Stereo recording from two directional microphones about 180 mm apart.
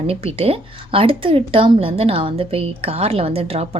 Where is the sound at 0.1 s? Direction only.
35° right (ahead or behind).